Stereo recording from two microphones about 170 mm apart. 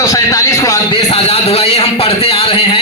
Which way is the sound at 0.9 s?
35° left (ahead or behind).